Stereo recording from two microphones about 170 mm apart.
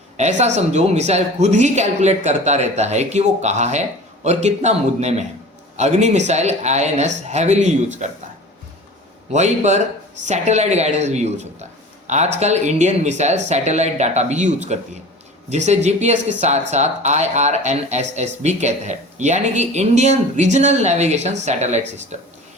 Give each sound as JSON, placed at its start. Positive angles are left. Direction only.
{"t": 0.2, "sound": "speech", "side_deg": -45}
{"t": 9.3, "sound": "a man's voice", "side_deg": -40}